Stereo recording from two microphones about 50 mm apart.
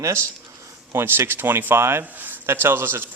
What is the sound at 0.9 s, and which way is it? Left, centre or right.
Speech, right.